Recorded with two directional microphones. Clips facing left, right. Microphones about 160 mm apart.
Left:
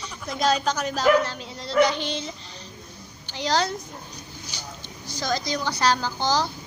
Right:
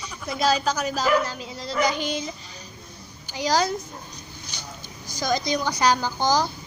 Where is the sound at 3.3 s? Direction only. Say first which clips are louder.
Right 2 dB; 10° right (ahead or behind).